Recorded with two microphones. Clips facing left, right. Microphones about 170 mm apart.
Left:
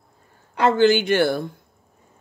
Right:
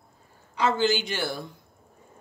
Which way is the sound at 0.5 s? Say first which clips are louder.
Left 7 dB; 60° left (ahead or behind).